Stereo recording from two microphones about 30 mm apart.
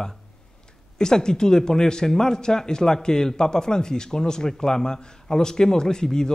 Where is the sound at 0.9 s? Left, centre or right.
Left.